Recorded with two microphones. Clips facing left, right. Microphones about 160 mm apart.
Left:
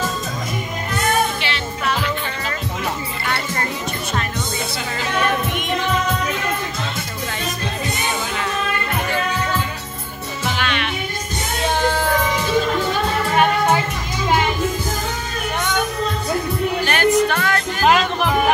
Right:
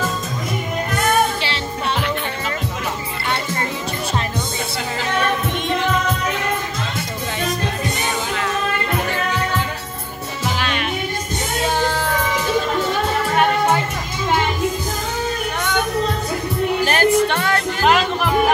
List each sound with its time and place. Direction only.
1.4 s music: 30° right (ahead or behind)
10.6 s music: 40° right (ahead or behind)
16.8 s music: 35° right (ahead or behind)
17.8 s music: centre (ahead or behind)